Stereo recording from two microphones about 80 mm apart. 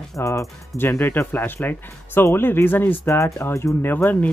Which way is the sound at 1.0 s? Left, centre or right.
Left.